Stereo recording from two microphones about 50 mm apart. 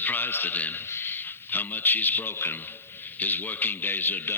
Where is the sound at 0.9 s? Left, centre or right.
Left.